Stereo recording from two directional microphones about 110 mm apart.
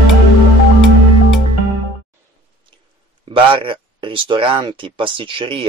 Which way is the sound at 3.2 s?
50° right (ahead or behind).